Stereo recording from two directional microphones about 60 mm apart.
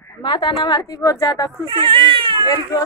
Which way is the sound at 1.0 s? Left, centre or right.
Left.